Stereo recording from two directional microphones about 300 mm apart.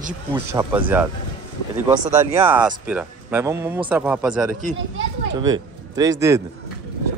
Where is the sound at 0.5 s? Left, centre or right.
Centre.